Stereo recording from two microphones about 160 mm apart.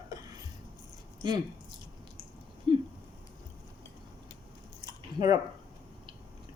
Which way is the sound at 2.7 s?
30° right (ahead or behind).